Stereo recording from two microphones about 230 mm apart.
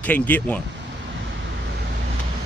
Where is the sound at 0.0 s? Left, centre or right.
Centre.